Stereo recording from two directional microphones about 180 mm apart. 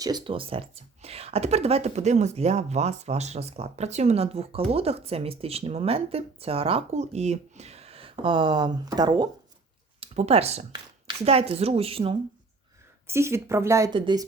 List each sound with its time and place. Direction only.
0.0 s speech: 25° right (ahead or behind)
10.0 s speech: 35° right (ahead or behind)
13.1 s speech: 15° right (ahead or behind)